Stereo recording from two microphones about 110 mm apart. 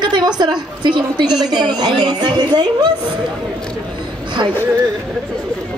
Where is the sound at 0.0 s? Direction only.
40° right (ahead or behind).